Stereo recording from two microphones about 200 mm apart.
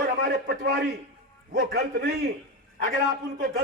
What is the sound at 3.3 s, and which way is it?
Speech, 45° right (ahead or behind).